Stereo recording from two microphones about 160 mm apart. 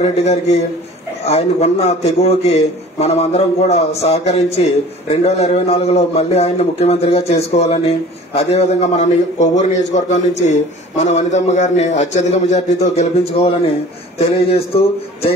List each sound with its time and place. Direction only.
0.0 s a man's voice: 45° left (ahead or behind)